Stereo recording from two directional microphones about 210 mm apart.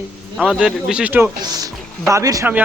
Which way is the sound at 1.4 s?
20° right (ahead or behind).